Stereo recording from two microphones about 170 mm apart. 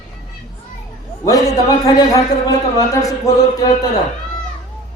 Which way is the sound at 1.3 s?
20° left (ahead or behind).